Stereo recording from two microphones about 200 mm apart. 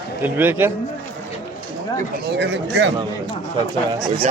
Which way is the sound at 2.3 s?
60° right (ahead or behind).